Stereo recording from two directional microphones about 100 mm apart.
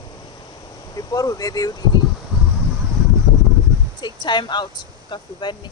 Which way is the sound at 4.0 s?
45° left (ahead or behind).